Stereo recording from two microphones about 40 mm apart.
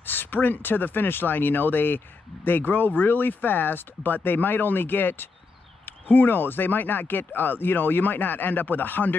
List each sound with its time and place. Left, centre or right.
0.0 s speech: left